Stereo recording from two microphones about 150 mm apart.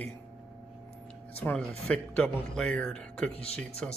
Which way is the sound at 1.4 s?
10° left (ahead or behind).